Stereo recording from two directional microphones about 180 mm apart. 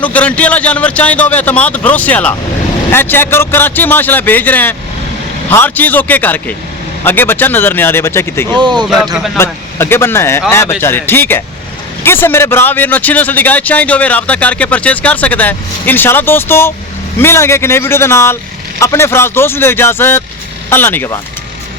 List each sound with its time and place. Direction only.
0.0 s a man's voice: 10° left (ahead or behind)
8.4 s speech: 25° right (ahead or behind)
9.1 s a man's voice: centre (ahead or behind)
9.4 s a man's voice: 15° left (ahead or behind)